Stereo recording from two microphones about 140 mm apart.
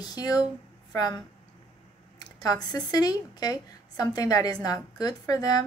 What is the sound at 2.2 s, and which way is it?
Speech, 30° left (ahead or behind).